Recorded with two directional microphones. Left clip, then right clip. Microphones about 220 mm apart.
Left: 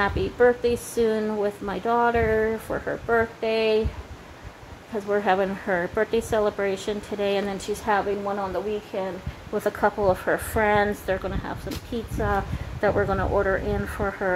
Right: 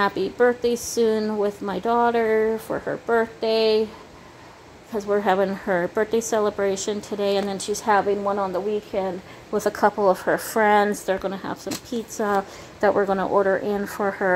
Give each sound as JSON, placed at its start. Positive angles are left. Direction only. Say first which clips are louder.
{"t": 0.0, "sound": "a woman's voice", "louder": "right 1 dB", "side_deg": -15}
{"t": 4.9, "sound": "a woman's voice", "louder": "right 2 dB", "side_deg": -15}